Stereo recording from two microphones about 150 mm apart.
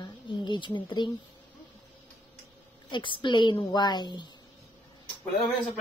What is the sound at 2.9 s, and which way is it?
A woman's voice, 35° left (ahead or behind).